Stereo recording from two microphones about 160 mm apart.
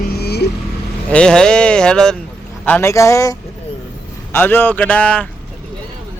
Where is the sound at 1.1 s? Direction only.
5° left (ahead or behind).